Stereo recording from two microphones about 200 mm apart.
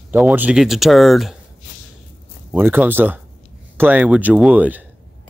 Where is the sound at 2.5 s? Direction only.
10° right (ahead or behind).